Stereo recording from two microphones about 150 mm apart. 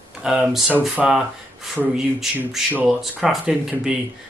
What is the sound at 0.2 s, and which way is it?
Speech, 5° right (ahead or behind).